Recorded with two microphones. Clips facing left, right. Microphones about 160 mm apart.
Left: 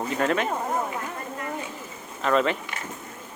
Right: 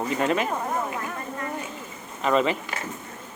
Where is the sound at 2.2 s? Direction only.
Centre (ahead or behind).